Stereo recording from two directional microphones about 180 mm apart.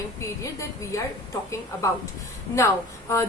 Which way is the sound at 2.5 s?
15° left (ahead or behind).